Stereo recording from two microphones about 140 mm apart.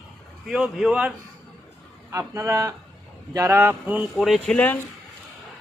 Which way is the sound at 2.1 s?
20° right (ahead or behind).